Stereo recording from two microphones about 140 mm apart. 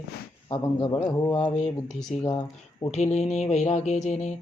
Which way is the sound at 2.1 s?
Centre (ahead or behind).